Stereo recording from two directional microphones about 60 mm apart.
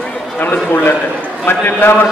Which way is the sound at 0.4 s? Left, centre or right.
Left.